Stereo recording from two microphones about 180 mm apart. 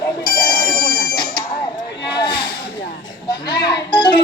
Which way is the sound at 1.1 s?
25° left (ahead or behind).